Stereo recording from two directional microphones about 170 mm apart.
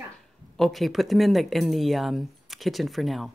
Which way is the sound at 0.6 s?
Centre (ahead or behind).